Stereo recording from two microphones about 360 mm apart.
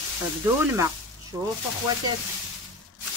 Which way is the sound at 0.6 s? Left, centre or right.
Centre.